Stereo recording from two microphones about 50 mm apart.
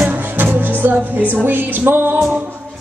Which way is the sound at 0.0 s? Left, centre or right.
Right.